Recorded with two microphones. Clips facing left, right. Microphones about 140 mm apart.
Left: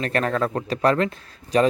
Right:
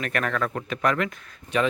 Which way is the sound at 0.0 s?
30° left (ahead or behind).